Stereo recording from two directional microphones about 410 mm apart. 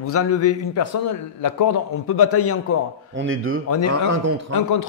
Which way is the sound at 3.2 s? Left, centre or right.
Right.